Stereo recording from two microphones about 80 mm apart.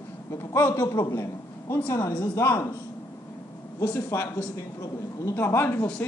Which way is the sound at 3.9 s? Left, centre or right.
Left.